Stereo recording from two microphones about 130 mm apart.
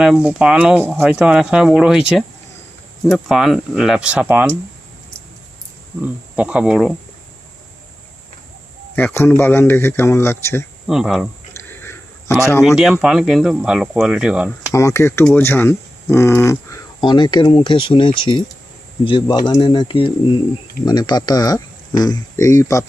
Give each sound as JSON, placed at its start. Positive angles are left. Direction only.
{"t": 0.0, "sound": "speech", "side_deg": -5}
{"t": 6.3, "sound": "speech", "side_deg": -10}
{"t": 9.0, "sound": "speech", "side_deg": 15}
{"t": 10.8, "sound": "speech", "side_deg": 0}
{"t": 11.8, "sound": "a sound", "side_deg": 20}
{"t": 12.6, "sound": "speech", "side_deg": 0}
{"t": 14.7, "sound": "speech", "side_deg": 25}
{"t": 17.0, "sound": "speech", "side_deg": 35}